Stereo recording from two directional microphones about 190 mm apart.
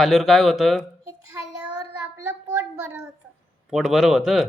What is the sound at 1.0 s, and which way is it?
Child singing, 20° right (ahead or behind).